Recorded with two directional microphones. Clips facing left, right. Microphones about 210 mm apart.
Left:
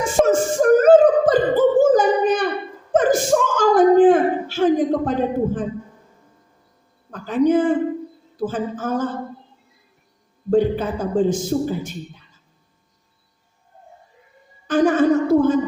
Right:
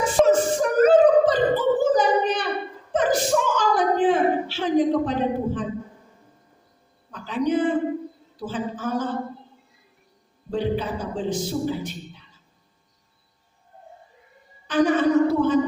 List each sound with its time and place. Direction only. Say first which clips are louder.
0.0 s beatboxing: left 1 dB; 45° left (ahead or behind)
2.9 s gasp: left 4 dB; 45° left (ahead or behind)
7.1 s a sound: left 6 dB; 45° left (ahead or behind)
8.4 s speech: left 5 dB; 45° left (ahead or behind)
10.5 s a man's voice: left 7 dB; 50° left (ahead or behind)
14.7 s a sound: left 3 dB; 45° left (ahead or behind)